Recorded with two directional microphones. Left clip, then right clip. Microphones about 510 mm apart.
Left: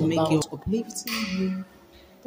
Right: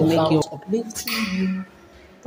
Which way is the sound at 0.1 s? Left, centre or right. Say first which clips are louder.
Right 5 dB; left.